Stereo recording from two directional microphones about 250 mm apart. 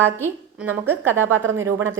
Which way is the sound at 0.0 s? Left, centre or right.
Centre.